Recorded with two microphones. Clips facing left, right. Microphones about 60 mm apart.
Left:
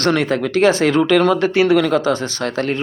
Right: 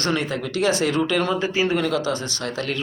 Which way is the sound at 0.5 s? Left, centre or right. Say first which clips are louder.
Left 6 dB; left.